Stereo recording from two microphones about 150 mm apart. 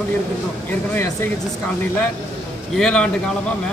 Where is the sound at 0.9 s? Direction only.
15° left (ahead or behind).